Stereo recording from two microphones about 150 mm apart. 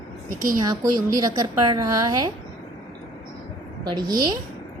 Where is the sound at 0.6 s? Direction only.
25° right (ahead or behind).